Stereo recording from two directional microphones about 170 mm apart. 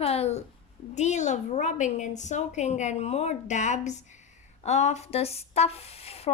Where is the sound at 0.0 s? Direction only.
35° left (ahead or behind).